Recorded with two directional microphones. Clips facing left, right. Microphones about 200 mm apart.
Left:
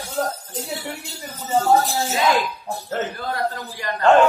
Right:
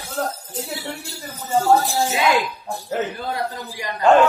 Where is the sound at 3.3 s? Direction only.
15° right (ahead or behind).